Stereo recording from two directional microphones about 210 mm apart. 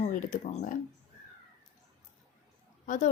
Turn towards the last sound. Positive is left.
turn(degrees=35)  # may be behind; listen again after turning